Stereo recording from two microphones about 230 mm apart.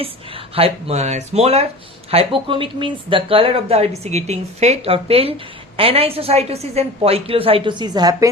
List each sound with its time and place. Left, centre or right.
0.0 s speech: right